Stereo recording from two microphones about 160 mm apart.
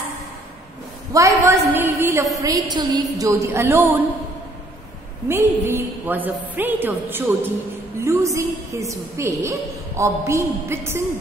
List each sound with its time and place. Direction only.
1.1 s a woman's voice: 20° right (ahead or behind)
5.3 s a woman's voice: 15° right (ahead or behind)